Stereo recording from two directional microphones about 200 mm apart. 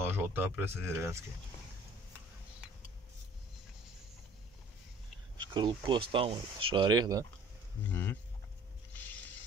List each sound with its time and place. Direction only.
0.0 s speech: 10° right (ahead or behind)
5.4 s speech: 20° right (ahead or behind)
7.8 s speech: 10° left (ahead or behind)
8.9 s a sound: 10° left (ahead or behind)